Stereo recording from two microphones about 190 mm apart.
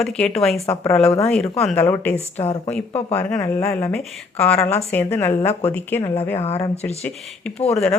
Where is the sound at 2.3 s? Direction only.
30° left (ahead or behind).